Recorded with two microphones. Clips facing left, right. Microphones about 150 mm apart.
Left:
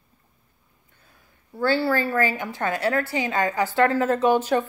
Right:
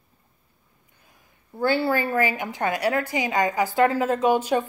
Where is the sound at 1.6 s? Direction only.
20° right (ahead or behind).